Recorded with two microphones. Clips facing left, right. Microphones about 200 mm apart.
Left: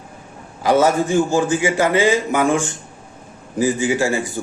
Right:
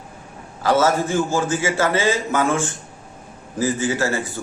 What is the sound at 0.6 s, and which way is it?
A man's voice, 15° left (ahead or behind).